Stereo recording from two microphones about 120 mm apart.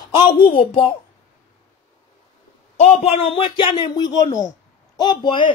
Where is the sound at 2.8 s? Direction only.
60° left (ahead or behind).